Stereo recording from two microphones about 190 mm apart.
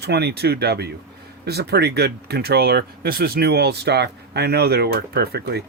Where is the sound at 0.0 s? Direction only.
60° right (ahead or behind).